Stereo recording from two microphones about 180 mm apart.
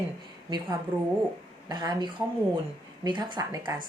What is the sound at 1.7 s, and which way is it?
Speech, 25° right (ahead or behind).